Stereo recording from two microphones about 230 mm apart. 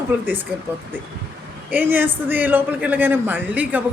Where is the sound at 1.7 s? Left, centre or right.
Centre.